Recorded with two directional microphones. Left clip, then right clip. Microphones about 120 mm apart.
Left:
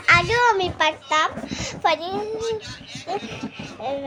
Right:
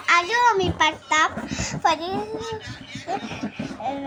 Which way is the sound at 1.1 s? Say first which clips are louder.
Right 1 dB; 30° left (ahead or behind).